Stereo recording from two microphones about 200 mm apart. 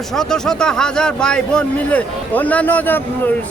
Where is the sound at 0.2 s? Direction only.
5° left (ahead or behind).